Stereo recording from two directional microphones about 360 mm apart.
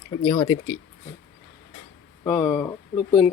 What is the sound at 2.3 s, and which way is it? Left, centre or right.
Speech, centre.